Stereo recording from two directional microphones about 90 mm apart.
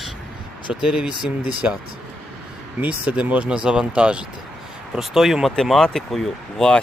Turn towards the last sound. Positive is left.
turn(degrees=10)  # may be behind; listen again after turning